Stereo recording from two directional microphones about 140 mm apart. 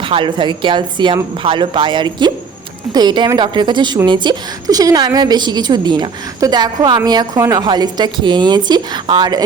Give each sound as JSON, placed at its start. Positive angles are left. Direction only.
{"t": 0.0, "sound": "a woman's voice", "side_deg": -35}